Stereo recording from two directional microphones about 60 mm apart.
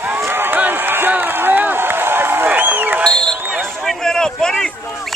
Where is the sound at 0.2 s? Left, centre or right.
Right.